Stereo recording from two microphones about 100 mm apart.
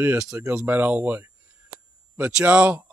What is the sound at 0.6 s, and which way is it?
Speech, 15° right (ahead or behind).